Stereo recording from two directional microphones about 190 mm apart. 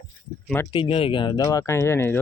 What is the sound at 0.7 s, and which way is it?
Speech, 30° left (ahead or behind).